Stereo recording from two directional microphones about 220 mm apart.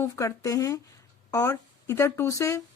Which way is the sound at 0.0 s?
15° left (ahead or behind).